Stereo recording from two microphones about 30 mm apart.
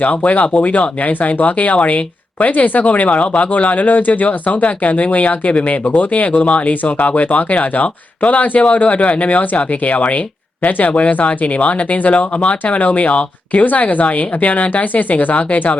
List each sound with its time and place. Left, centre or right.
0.0 s speech: left
1.4 s speech: left
10.6 s speech: left
13.7 s speech: left